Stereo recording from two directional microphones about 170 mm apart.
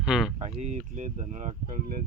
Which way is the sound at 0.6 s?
45° right (ahead or behind).